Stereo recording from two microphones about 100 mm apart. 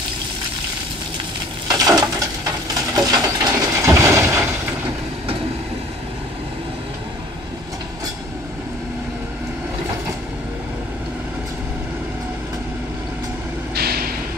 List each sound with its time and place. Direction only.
1.7 s crushing: 35° right (ahead or behind)
2.9 s coin: 40° right (ahead or behind)
3.5 s a sound: 30° right (ahead or behind)